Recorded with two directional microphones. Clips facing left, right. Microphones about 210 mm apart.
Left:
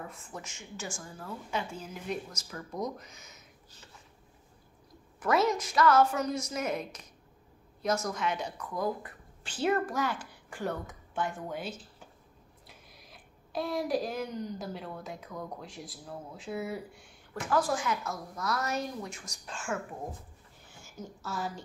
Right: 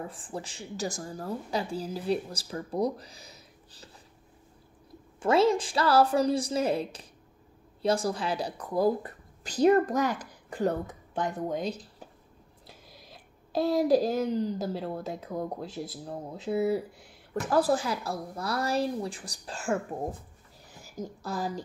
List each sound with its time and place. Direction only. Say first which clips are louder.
0.0 s a woman's voice: right 6 dB; 30° right (ahead or behind)
5.2 s a woman's voice: right 5 dB; 30° right (ahead or behind)
13.1 s a sound: right 6 dB; 25° right (ahead or behind)
14.0 s a woman's voice: right 8 dB; 30° right (ahead or behind)